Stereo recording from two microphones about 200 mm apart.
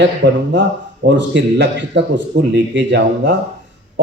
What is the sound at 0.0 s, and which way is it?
A man's voice, 60° right (ahead or behind).